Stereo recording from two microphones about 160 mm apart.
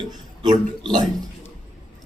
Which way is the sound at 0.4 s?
25° right (ahead or behind).